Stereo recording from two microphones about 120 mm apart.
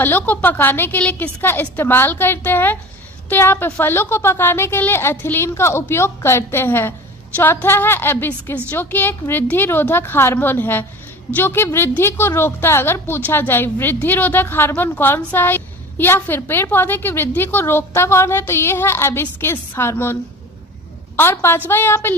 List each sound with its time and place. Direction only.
0.0 s a woman's voice: 15° left (ahead or behind)
21.2 s a woman's voice: 20° left (ahead or behind)